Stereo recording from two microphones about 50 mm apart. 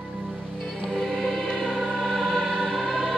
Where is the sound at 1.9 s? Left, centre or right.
Centre.